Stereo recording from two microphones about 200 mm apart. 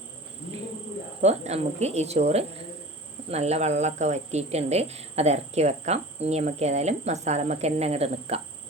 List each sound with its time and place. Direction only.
1.2 s a woman's voice: 35° right (ahead or behind)